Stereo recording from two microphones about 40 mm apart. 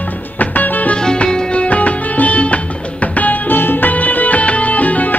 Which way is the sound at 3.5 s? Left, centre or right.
Left.